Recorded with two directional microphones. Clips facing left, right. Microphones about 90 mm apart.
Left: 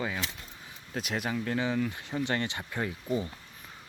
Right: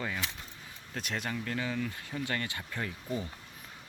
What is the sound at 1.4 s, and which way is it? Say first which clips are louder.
Speech: left 5 dB; 25° left (ahead or behind).